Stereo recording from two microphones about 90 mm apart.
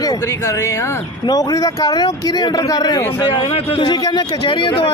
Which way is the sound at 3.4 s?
75° left (ahead or behind).